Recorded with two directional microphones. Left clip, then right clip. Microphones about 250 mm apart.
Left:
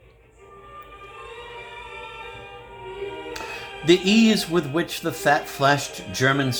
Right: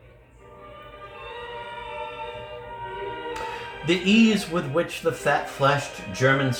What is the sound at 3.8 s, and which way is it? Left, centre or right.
Speech, left.